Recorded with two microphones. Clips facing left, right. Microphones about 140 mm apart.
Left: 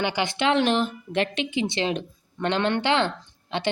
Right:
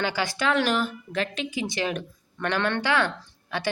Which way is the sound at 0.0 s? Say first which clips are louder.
Left 2 dB; 20° left (ahead or behind).